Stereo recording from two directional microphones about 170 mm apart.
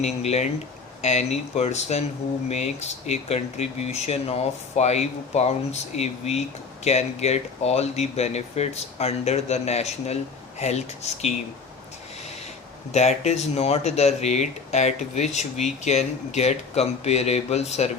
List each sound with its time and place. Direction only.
0.0 s speech: 40° left (ahead or behind)
12.9 s speech: 40° left (ahead or behind)